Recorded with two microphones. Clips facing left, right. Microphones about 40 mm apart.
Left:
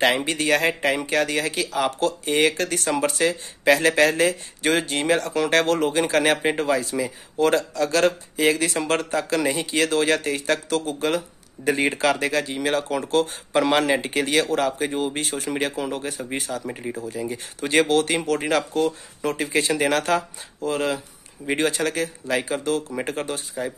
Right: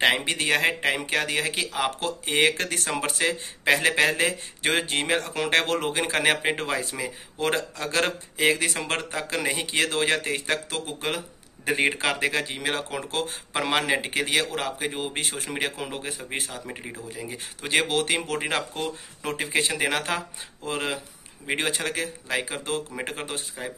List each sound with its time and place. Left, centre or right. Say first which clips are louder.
0.0 s speech: left 2 dB; right
6.5 s speech: left 6 dB; right
7.0 s speech: left 7 dB; right
13.6 s speech: left 5 dB; centre
15.1 s speech: left 4 dB; right
15.5 s speech: left 5 dB; centre
16.3 s speech: left 3 dB; right
17.1 s speech: left 6 dB; centre
23.6 s speech: left 8 dB; centre